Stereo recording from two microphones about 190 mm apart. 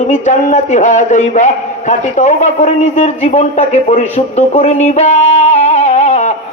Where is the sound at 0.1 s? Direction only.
40° left (ahead or behind).